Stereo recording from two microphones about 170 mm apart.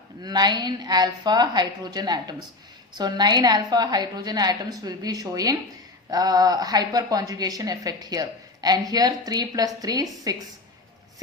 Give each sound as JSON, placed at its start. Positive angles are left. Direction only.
{"t": 0.2, "sound": "a woman's voice", "side_deg": -25}